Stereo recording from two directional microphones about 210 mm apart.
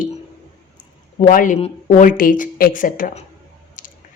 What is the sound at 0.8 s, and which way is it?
A woman's voice, 40° left (ahead or behind).